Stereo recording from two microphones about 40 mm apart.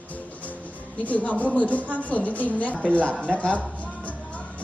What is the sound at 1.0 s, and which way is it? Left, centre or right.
Speech, left.